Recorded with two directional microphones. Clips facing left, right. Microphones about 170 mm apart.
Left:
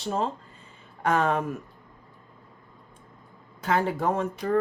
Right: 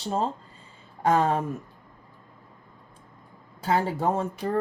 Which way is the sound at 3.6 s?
30° right (ahead or behind).